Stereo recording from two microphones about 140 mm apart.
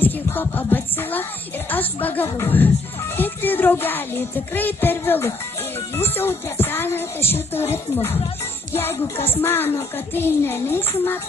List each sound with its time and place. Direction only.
0.0 s music: 15° left (ahead or behind)